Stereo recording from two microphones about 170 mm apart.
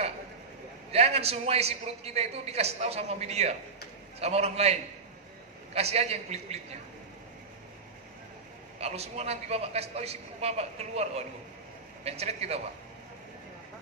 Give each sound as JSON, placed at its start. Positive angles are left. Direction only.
{"t": 0.9, "sound": "a man's voice", "side_deg": -40}
{"t": 8.7, "sound": "a man's voice", "side_deg": -40}